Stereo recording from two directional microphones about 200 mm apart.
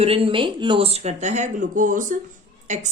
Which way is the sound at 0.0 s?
25° right (ahead or behind).